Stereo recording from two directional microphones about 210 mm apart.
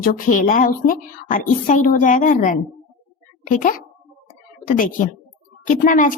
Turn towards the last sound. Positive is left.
turn(degrees=40)  # may be behind; listen again after turning